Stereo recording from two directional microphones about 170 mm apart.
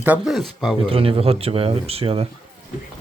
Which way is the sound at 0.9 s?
35° right (ahead or behind).